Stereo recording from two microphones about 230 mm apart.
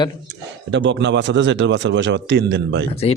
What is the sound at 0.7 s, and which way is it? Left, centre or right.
A man's voice, right.